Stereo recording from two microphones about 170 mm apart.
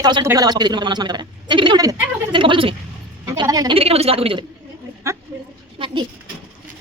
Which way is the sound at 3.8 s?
35° right (ahead or behind).